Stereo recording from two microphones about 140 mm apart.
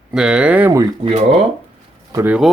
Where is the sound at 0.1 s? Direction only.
5° right (ahead or behind).